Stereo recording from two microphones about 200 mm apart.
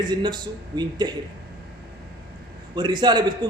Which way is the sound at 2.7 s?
20° right (ahead or behind).